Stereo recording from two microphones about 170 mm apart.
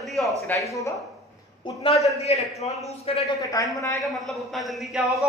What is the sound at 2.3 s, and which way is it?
Speech, 35° left (ahead or behind).